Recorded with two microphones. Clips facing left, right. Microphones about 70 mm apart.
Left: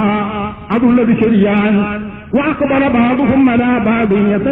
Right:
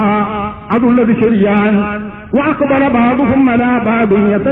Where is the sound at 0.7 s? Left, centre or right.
Centre.